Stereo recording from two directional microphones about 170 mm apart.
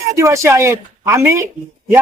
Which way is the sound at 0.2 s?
15° right (ahead or behind).